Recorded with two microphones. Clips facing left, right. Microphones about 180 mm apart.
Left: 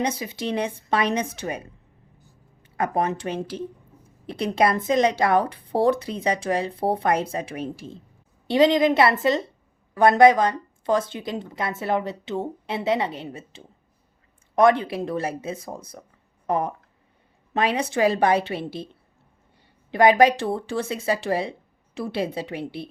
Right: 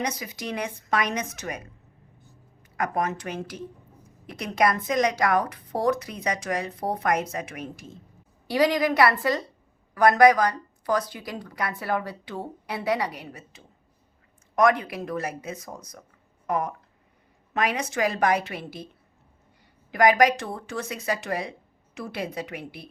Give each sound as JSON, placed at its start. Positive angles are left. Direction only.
{"t": 0.0, "sound": "a woman's voice", "side_deg": 30}
{"t": 2.7, "sound": "a woman's voice", "side_deg": 30}
{"t": 19.9, "sound": "a woman's voice", "side_deg": 30}